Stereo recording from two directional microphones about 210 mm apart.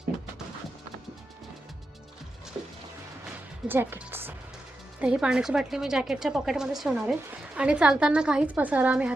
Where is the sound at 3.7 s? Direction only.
10° right (ahead or behind).